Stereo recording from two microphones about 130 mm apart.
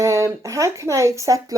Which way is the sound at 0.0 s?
25° right (ahead or behind).